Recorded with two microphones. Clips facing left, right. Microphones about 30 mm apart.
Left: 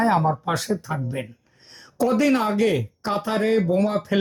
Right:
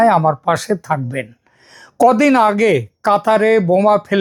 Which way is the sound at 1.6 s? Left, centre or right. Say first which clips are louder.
Right 11 dB; right.